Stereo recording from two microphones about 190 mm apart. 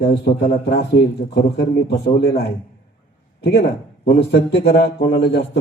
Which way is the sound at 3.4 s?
60° left (ahead or behind).